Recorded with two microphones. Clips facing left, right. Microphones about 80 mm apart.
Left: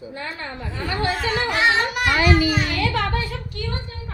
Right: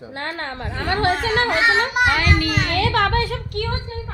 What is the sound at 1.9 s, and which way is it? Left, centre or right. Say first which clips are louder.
Speech: right 4 dB; right.